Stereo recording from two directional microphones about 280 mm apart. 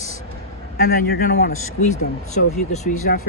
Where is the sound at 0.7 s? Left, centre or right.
Left.